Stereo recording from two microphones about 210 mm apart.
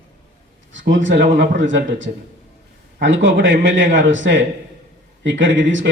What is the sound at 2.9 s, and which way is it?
A man's voice, 60° right (ahead or behind).